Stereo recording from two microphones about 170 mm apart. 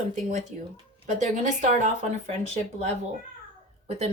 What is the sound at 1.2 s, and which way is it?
Speech, 45° right (ahead or behind).